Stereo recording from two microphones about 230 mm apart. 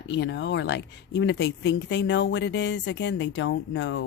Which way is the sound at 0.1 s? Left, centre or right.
Left.